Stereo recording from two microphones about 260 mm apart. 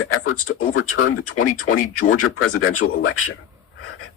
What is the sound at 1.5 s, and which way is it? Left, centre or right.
Speech, left.